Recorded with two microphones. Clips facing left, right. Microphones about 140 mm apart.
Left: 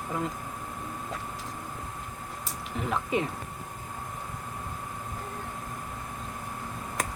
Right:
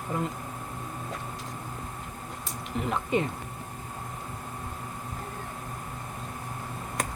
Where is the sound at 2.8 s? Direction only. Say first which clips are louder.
Right 1 dB; centre (ahead or behind).